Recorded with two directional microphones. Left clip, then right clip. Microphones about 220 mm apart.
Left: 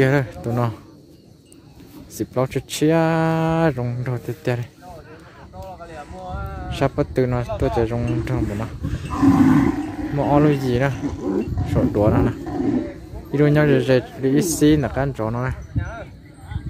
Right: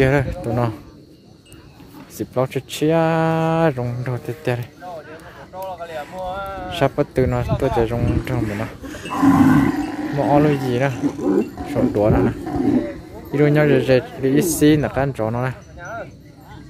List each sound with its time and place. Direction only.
0.0 s speech: 10° left (ahead or behind)
2.1 s speech: 10° left (ahead or behind)
5.8 s a sound: 35° right (ahead or behind)
6.7 s speech: 5° left (ahead or behind)
9.1 s roar: 10° right (ahead or behind)
9.8 s roaring cats: 40° right (ahead or behind)
10.1 s speech: 10° left (ahead or behind)
11.0 s speech: 50° right (ahead or behind)
11.7 s speech: 10° left (ahead or behind)
12.4 s speech: 50° right (ahead or behind)
13.3 s speech: 10° left (ahead or behind)